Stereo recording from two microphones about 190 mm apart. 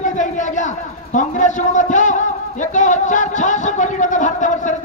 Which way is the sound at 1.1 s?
40° left (ahead or behind).